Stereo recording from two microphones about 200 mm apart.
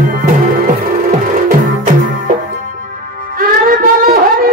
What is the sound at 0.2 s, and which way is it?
Music, 45° right (ahead or behind).